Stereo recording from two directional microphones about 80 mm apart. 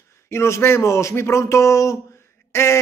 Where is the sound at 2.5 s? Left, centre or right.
Left.